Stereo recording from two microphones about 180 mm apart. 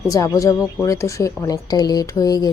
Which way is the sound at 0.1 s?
20° left (ahead or behind).